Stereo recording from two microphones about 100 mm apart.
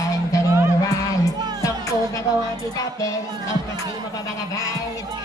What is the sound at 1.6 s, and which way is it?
Music, 35° left (ahead or behind).